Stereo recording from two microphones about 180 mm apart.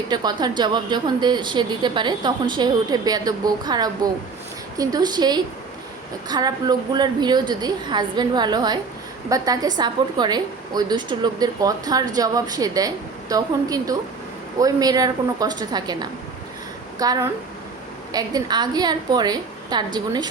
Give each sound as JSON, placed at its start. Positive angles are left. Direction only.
{"t": 0.1, "sound": "a woman's voice", "side_deg": -25}